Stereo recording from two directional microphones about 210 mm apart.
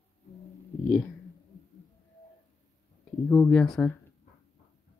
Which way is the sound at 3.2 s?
5° left (ahead or behind).